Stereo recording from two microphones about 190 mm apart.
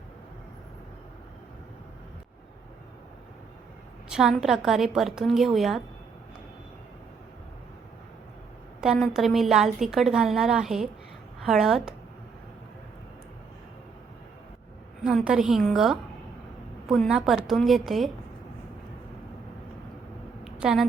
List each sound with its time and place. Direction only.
4.1 s a woman's voice: centre (ahead or behind)
8.8 s a woman's voice: 5° right (ahead or behind)
15.0 s a woman's voice: centre (ahead or behind)
20.4 s a sound: 5° right (ahead or behind)